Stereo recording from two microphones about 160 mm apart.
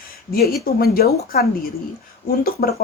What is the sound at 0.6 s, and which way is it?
A woman's voice, 70° left (ahead or behind).